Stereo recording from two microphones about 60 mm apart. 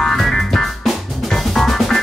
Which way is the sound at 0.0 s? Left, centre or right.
Centre.